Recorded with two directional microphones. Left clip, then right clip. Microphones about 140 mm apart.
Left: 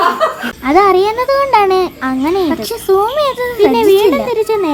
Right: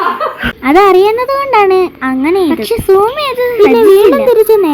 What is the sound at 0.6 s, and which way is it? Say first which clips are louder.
A child's voice: right 3 dB; 30° right (ahead or behind).